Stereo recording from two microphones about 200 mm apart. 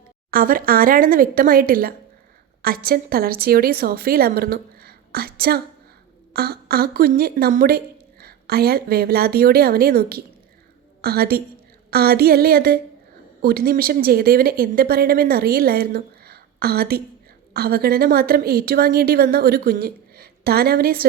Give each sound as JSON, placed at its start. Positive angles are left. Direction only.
{"t": 0.3, "sound": "speech", "side_deg": -45}